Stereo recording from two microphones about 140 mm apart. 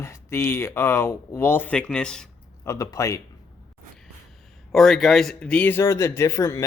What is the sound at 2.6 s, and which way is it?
Speech, 20° left (ahead or behind).